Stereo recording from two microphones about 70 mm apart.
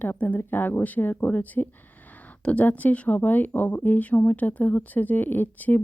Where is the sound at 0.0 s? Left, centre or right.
Left.